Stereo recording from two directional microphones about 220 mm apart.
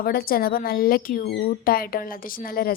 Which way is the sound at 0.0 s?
45° left (ahead or behind).